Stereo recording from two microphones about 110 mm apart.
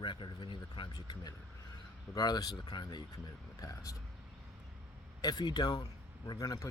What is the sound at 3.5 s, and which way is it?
Speech, 30° left (ahead or behind).